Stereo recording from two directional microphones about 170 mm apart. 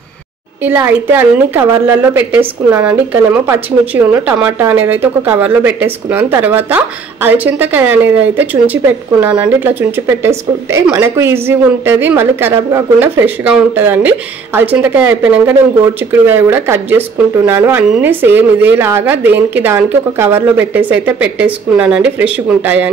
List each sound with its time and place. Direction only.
0.7 s speech: 10° right (ahead or behind)